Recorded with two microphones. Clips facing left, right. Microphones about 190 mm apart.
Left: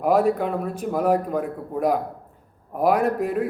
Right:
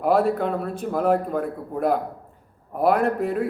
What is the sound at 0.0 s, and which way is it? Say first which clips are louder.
A man's voice: left 1 dB; 5° left (ahead or behind).